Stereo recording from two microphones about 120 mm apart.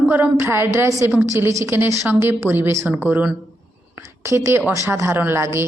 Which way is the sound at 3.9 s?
25° right (ahead or behind).